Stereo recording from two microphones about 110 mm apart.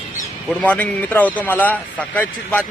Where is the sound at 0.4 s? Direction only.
10° left (ahead or behind).